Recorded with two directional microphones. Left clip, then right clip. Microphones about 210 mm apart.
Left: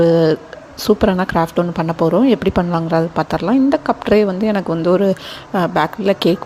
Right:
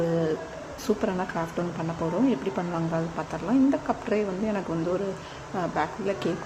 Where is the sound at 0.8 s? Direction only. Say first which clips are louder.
Left 13 dB; 40° left (ahead or behind).